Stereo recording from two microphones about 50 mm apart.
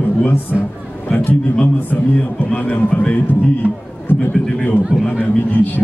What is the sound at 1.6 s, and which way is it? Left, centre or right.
A man's voice, left.